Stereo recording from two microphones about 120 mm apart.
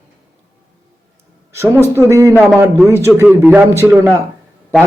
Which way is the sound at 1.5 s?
20° right (ahead or behind).